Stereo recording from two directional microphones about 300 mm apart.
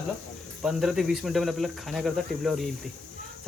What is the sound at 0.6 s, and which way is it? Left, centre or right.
Speech, centre.